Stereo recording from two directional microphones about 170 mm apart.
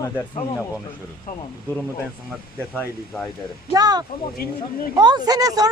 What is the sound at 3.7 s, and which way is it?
Speech, 25° right (ahead or behind).